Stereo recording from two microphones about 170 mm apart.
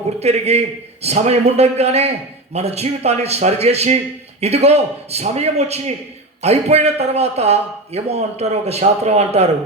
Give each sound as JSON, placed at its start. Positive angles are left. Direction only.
{"t": 0.2, "sound": "a man's voice", "side_deg": -40}